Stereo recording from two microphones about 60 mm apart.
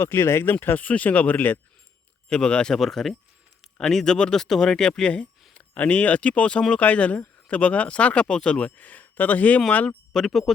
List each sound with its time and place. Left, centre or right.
0.0 s speech: left
0.6 s speech: left
2.3 s speech: centre
2.7 s speech: centre; by 9.6 s left
10.1 s speech: centre